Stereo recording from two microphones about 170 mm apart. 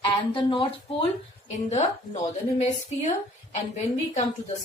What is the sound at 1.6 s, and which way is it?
Speech, 45° left (ahead or behind).